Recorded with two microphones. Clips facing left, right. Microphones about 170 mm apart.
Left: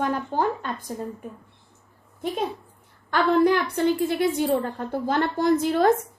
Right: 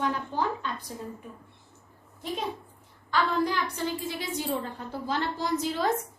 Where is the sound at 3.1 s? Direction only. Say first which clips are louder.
Left 7 dB; 60° left (ahead or behind).